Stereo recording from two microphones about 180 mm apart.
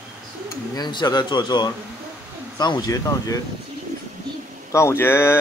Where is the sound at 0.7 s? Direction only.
25° left (ahead or behind).